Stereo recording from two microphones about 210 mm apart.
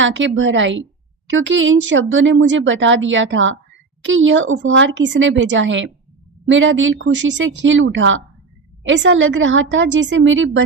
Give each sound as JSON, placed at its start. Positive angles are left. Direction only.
{"t": 0.0, "sound": "speech", "side_deg": -65}